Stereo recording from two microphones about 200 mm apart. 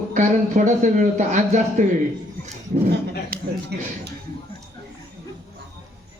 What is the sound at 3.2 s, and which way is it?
Speech, 50° right (ahead or behind).